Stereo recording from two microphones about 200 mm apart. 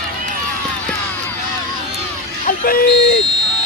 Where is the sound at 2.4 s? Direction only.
45° left (ahead or behind).